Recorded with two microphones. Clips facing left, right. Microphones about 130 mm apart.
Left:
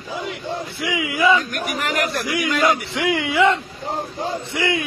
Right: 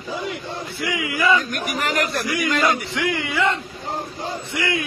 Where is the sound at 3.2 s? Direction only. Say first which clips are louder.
Left 7 dB; 15° left (ahead or behind).